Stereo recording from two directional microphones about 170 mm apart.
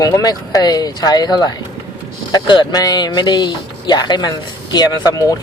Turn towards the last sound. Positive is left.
turn(degrees=20)  # may be behind; listen again after turning